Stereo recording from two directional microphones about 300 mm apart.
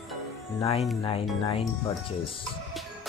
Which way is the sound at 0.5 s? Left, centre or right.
Left.